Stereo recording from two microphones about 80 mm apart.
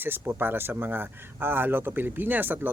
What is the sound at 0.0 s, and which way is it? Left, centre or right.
Speech, right.